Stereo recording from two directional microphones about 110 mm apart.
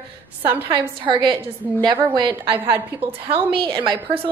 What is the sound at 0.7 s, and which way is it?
A woman's voice, 45° right (ahead or behind).